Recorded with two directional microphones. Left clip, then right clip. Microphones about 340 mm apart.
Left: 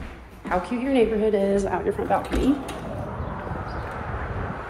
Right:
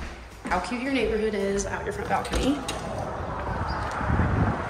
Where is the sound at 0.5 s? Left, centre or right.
Centre.